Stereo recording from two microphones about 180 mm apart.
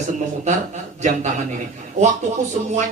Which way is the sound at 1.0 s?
40° right (ahead or behind).